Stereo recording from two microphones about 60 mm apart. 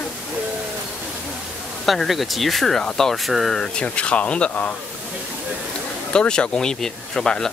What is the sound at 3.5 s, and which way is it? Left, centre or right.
Speech, centre.